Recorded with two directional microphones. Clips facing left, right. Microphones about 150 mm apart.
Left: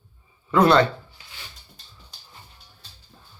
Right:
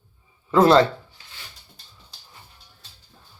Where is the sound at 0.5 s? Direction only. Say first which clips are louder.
Right 2 dB; 30° right (ahead or behind).